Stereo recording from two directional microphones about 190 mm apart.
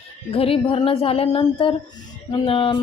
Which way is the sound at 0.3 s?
30° left (ahead or behind).